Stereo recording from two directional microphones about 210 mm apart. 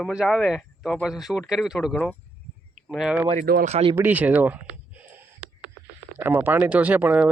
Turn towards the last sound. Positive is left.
turn(degrees=-10)  # may be behind; listen again after turning